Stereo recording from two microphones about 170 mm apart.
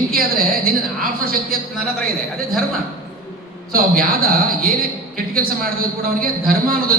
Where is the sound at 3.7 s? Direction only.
60° right (ahead or behind).